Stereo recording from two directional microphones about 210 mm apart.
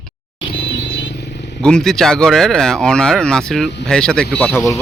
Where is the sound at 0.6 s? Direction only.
55° left (ahead or behind).